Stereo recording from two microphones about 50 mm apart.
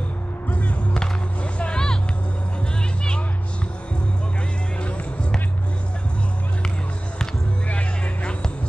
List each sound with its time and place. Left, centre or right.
0.5 s music: left
1.6 s vehicle: centre
4.7 s music: left
7.6 s music: left